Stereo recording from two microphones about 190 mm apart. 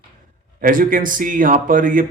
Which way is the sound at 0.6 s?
45° right (ahead or behind).